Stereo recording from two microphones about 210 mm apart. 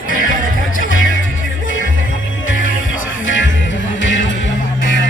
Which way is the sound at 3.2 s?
65° left (ahead or behind).